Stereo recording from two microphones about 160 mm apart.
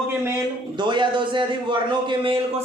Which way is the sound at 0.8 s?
30° right (ahead or behind).